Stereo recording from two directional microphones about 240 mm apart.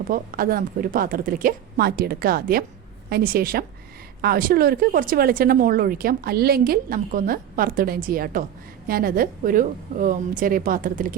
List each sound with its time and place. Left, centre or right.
0.1 s speech: right